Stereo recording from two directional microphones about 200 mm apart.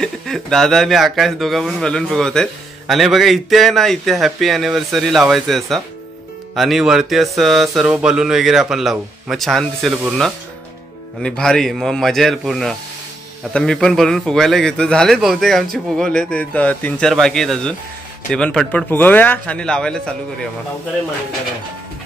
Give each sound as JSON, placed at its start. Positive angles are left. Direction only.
{"t": 0.0, "sound": "speech", "side_deg": 0}